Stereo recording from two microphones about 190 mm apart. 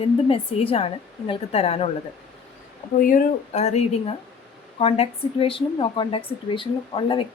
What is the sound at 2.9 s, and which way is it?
Speech, 45° left (ahead or behind).